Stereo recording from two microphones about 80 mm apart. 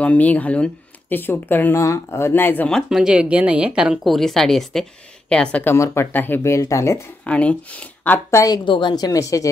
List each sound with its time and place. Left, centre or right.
0.0 s speech: centre
1.8 s speech: left
2.9 s speech: centre
5.8 s speech: left
6.1 s speech: left
6.5 s speech: left
7.2 s speech: centre
8.3 s a woman's voice: left
8.6 s speech: left